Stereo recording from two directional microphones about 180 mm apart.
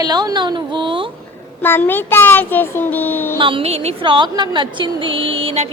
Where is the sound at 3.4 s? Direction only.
30° right (ahead or behind).